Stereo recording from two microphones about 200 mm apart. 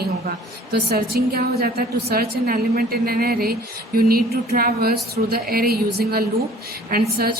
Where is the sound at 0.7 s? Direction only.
50° right (ahead or behind).